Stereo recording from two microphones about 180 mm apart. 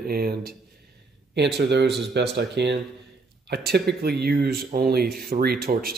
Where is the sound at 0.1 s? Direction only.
55° right (ahead or behind).